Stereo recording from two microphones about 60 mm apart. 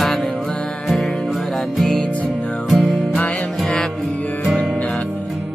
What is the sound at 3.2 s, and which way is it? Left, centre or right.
Music, left.